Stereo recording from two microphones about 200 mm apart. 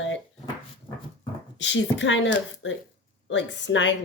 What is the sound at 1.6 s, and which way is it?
Speech, 65° left (ahead or behind).